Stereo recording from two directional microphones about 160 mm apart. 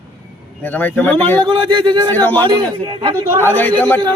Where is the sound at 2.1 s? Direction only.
10° left (ahead or behind).